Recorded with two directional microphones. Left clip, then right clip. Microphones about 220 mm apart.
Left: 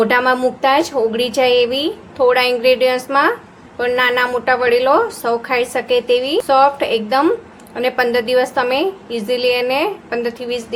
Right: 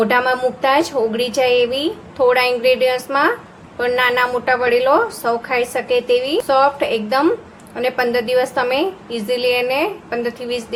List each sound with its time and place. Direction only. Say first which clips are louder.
0.0 s a woman's voice: left 2 dB; 10° left (ahead or behind)